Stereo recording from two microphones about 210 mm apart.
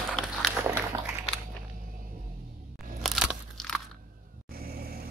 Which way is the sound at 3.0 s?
Centre (ahead or behind).